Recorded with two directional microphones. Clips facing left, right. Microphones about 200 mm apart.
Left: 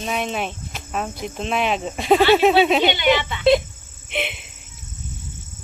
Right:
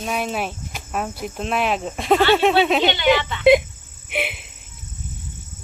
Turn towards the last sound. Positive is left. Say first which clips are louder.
# right 1 dB
turn(degrees=-5)  # may be behind; listen again after turning